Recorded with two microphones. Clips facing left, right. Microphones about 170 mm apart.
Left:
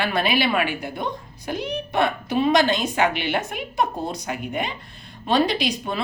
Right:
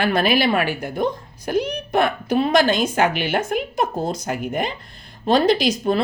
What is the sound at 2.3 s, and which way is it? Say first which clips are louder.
Speech: right 2 dB; 45° right (ahead or behind).